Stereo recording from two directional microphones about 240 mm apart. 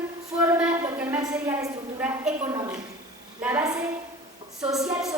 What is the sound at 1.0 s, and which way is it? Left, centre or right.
A woman's voice, centre.